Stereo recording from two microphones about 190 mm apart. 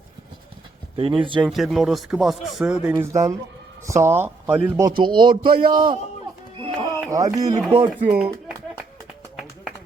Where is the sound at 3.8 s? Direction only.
15° right (ahead or behind).